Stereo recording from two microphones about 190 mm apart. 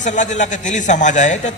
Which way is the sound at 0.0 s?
40° left (ahead or behind).